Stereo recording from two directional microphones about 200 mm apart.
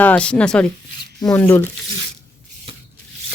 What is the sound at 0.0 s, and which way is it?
Speech, 5° left (ahead or behind).